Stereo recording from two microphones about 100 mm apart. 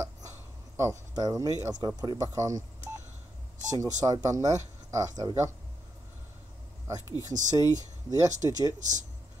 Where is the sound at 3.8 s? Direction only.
40° right (ahead or behind).